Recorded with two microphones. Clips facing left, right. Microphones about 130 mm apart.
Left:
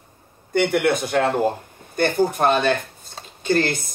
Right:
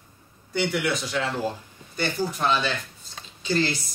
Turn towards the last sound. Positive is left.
turn(degrees=55)  # may be behind; listen again after turning